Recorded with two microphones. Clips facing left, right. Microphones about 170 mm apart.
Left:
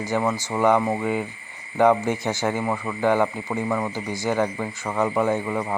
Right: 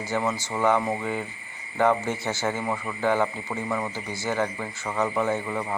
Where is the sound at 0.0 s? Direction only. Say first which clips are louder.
Left 3 dB; 10° left (ahead or behind).